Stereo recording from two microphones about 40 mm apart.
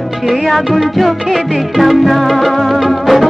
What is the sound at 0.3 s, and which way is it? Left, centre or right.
Music, centre.